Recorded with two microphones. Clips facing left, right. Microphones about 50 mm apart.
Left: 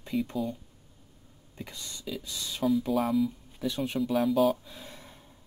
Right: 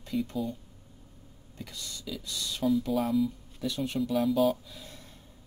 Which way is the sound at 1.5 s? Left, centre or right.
Left.